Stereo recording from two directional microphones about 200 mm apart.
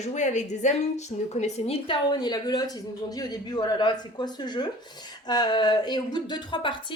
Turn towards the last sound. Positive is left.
turn(degrees=25)  # may be behind; listen again after turning